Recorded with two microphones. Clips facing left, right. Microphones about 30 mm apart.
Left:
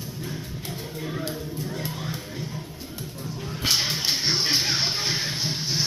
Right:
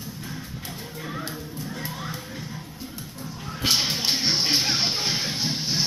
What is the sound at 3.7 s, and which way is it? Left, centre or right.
Music, right.